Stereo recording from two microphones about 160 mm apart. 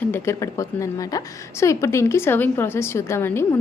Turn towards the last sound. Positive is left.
turn(degrees=15)  # may be behind; listen again after turning